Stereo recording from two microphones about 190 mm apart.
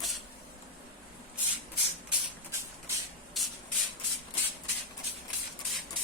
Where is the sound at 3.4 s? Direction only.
Centre (ahead or behind).